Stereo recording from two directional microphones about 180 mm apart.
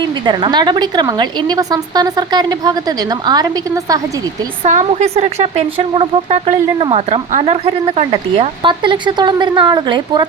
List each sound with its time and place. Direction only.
0.3 s a woman's voice: 25° right (ahead or behind)
4.6 s speech: 40° right (ahead or behind)